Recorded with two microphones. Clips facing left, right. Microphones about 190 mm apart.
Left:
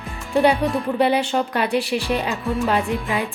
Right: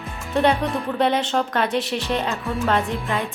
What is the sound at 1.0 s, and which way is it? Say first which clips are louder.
Music: left 1 dB; 10° left (ahead or behind).